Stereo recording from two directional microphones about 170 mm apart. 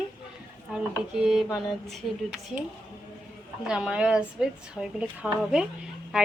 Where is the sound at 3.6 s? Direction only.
5° right (ahead or behind).